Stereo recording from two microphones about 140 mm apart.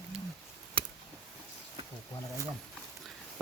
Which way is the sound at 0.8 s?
40° right (ahead or behind).